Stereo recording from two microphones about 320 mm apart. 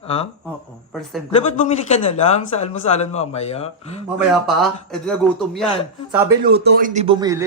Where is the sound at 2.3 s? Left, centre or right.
Centre.